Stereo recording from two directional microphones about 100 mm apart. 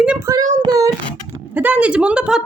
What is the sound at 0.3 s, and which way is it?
Child singing, 40° right (ahead or behind).